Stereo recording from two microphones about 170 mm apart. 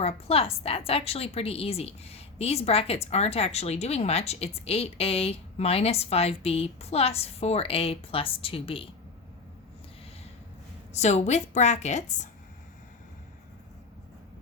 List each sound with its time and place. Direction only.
0.0 s a woman's voice: 35° left (ahead or behind)
10.9 s a woman's voice: 40° left (ahead or behind)